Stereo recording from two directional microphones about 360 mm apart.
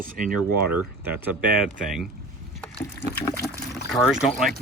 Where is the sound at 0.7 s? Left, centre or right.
Centre.